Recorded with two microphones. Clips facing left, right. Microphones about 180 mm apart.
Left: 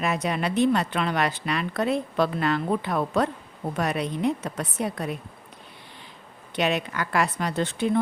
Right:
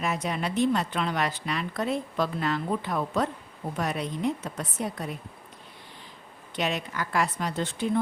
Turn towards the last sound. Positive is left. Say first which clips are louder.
# left 4 dB
turn(degrees=70)  # may be behind; listen again after turning